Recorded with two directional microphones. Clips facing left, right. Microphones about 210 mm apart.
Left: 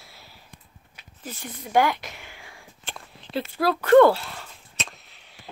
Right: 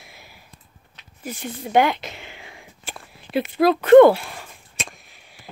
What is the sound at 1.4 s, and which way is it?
A woman's voice, 25° right (ahead or behind).